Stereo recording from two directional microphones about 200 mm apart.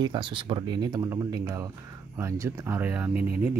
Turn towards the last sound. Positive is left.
turn(degrees=-5)  # may be behind; listen again after turning